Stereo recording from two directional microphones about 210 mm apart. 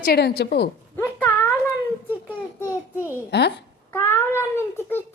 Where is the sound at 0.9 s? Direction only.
10° left (ahead or behind).